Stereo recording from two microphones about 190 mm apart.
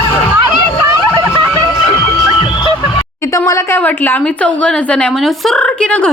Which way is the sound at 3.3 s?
15° left (ahead or behind).